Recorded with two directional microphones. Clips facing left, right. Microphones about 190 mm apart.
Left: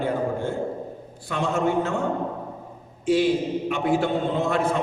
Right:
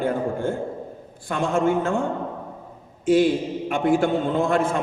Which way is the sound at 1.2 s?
50° right (ahead or behind).